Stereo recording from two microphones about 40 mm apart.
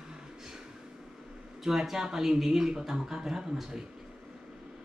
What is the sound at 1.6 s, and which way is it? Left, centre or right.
Speech, centre.